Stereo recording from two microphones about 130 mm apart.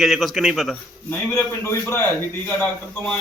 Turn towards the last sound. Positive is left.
turn(degrees=15)  # may be behind; listen again after turning